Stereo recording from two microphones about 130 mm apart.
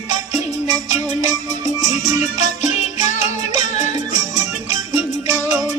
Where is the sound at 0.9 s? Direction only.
70° left (ahead or behind).